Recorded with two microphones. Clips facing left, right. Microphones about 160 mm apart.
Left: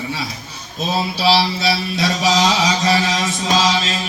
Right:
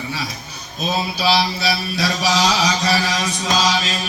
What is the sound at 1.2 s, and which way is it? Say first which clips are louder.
Mantra: left 3 dB; 25° left (ahead or behind).